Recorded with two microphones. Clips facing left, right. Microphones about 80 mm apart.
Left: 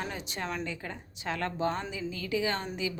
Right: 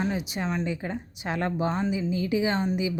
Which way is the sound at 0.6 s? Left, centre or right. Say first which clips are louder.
Right 7 dB; centre.